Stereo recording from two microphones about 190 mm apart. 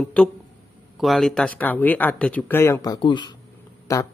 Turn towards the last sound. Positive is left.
turn(degrees=15)  # may be behind; listen again after turning